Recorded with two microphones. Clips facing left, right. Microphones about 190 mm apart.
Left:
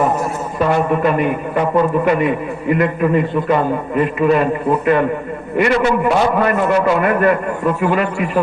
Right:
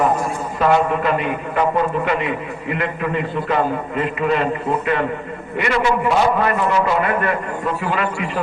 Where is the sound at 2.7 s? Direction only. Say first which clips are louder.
Left 8 dB; 45° left (ahead or behind).